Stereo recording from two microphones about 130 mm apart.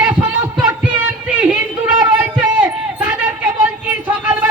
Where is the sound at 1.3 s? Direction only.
10° right (ahead or behind).